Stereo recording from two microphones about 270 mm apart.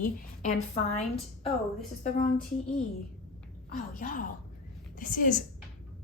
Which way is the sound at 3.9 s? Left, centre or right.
Left.